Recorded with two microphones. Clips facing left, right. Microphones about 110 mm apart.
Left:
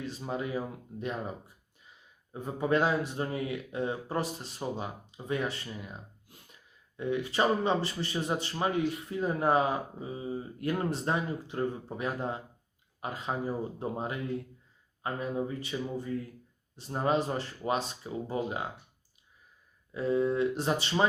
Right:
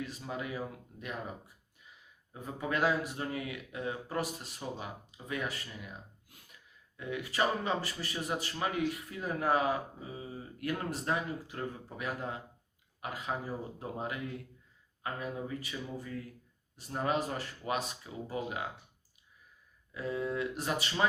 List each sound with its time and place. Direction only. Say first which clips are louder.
0.0 s a man's voice: left 4 dB; 30° left (ahead or behind)
19.9 s a man's voice: left 7 dB; 30° left (ahead or behind)